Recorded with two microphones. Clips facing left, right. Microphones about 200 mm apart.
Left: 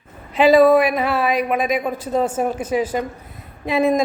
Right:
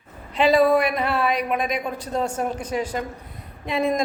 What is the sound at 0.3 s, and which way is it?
A man's voice, 5° left (ahead or behind).